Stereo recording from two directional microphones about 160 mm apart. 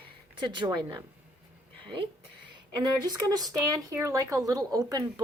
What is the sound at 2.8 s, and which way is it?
Speech, 25° right (ahead or behind).